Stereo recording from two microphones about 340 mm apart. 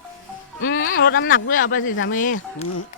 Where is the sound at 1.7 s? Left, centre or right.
Left.